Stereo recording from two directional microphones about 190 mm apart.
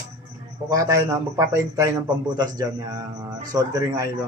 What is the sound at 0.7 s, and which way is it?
A man's voice, 15° right (ahead or behind).